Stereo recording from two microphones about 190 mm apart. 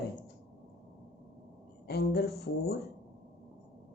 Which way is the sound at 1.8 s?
55° left (ahead or behind).